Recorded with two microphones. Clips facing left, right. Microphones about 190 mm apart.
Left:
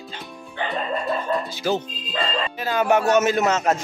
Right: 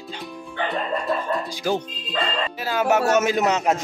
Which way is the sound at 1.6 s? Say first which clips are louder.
Even; 10° right (ahead or behind).